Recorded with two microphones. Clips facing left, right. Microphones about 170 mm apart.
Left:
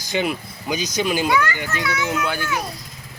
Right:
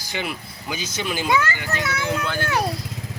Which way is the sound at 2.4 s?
65° right (ahead or behind).